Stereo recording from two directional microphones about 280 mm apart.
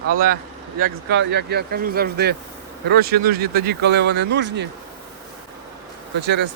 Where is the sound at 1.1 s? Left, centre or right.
Right.